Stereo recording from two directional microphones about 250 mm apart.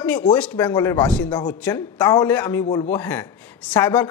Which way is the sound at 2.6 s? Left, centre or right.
Centre.